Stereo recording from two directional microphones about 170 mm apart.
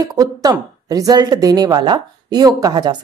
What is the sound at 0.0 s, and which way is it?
A woman's voice, 20° right (ahead or behind).